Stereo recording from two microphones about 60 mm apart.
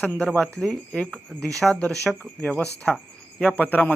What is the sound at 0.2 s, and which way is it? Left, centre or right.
Speech, centre.